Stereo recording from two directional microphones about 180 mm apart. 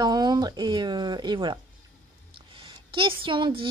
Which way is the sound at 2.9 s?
30° right (ahead or behind).